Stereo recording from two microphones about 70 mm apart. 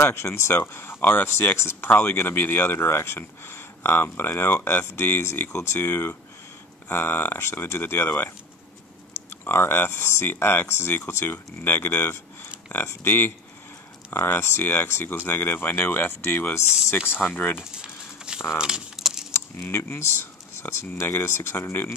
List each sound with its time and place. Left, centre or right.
0.0 s speech: left
9.3 s speech: left
17.6 s a sound: centre
18.6 s speech: centre
19.3 s speech: left